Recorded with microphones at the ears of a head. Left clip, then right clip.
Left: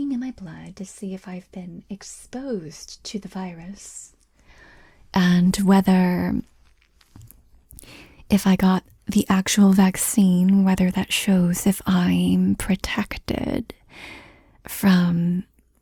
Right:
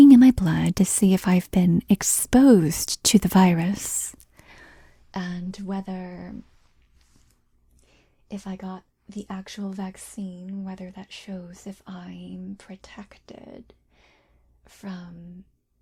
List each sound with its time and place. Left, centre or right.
0.0 s speech: right
5.1 s speech: left
7.8 s speech: left